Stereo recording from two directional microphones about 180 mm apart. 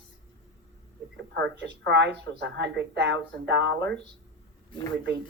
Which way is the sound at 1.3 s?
75° right (ahead or behind).